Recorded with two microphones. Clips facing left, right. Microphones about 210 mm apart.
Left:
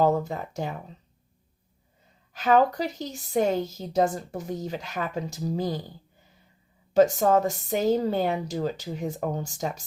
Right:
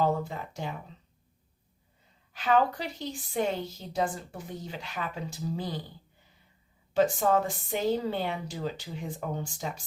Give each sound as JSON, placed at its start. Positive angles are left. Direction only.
{"t": 0.0, "sound": "a woman's voice", "side_deg": 40}
{"t": 2.3, "sound": "a woman's voice", "side_deg": 40}
{"t": 6.9, "sound": "a woman's voice", "side_deg": 40}